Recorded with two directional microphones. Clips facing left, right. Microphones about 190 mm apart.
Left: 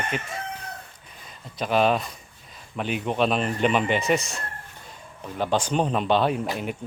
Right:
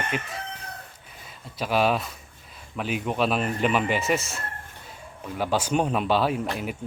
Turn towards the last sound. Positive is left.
turn(degrees=0)  # may be behind; listen again after turning